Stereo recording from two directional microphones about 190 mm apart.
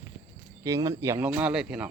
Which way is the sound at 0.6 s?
20° right (ahead or behind).